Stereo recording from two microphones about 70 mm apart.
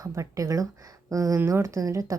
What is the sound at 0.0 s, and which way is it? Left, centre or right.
A woman's voice, right.